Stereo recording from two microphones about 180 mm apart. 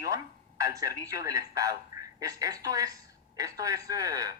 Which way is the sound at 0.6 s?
20° right (ahead or behind).